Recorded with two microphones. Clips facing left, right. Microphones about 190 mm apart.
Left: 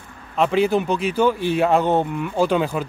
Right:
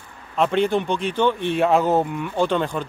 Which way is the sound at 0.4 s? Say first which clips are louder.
Left 1 dB; 5° left (ahead or behind).